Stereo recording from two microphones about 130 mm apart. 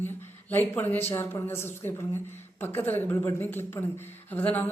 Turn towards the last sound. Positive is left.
turn(degrees=15)  # may be behind; listen again after turning